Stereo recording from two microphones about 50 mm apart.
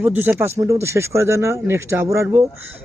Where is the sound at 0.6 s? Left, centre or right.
Right.